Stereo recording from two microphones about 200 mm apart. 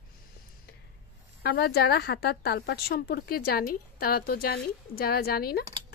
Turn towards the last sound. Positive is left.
turn(degrees=50)  # may be behind; listen again after turning